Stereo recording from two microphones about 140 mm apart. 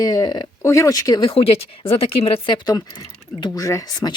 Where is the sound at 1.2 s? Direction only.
40° left (ahead or behind).